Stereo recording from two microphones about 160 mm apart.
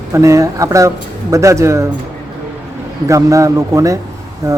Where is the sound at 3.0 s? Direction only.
20° right (ahead or behind).